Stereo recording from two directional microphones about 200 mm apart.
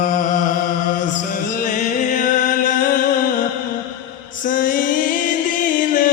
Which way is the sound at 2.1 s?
40° left (ahead or behind).